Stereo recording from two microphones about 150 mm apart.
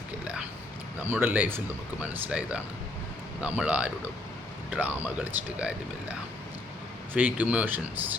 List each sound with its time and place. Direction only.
1.1 s speech: 10° right (ahead or behind)
7.1 s speech: 10° right (ahead or behind)